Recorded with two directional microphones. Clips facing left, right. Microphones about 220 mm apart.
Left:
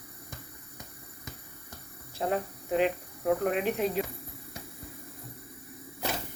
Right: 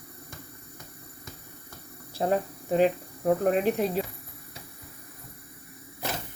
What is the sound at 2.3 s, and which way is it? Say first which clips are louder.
Speech: right 3 dB; 35° right (ahead or behind).